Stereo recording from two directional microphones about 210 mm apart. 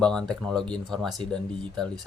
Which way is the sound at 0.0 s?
5° left (ahead or behind).